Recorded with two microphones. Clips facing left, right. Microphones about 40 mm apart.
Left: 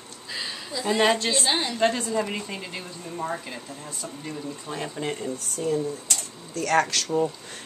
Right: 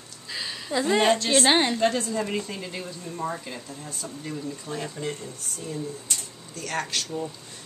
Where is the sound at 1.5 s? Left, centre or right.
Right.